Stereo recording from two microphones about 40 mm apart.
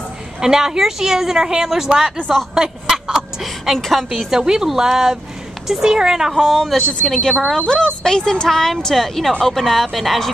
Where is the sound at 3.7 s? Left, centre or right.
Centre.